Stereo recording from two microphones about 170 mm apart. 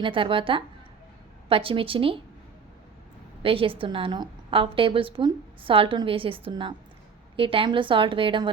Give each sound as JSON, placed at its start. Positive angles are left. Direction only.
{"t": 0.0, "sound": "a woman's voice", "side_deg": -30}
{"t": 3.4, "sound": "a woman's voice", "side_deg": -30}